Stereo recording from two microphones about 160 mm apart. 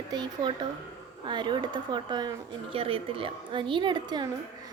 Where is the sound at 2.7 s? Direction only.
35° right (ahead or behind).